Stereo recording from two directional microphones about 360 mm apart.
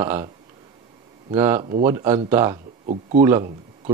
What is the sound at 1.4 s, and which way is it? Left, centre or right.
Speech, centre.